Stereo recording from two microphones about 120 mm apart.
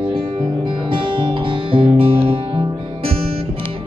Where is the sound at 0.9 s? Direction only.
45° right (ahead or behind).